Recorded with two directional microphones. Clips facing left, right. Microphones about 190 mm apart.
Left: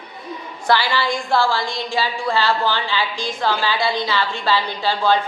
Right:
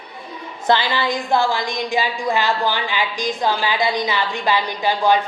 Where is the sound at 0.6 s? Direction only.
20° right (ahead or behind).